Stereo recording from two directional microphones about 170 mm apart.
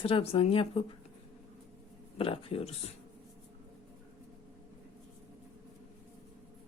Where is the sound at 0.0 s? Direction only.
35° left (ahead or behind).